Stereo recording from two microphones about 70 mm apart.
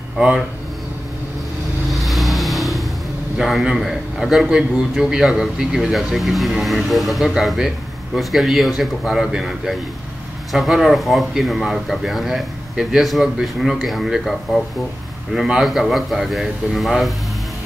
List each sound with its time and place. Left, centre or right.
1.9 s vehicle: centre
3.3 s a man's voice: centre
15.3 s a man's voice: centre